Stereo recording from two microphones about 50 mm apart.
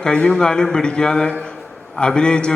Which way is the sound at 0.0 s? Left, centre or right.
Centre.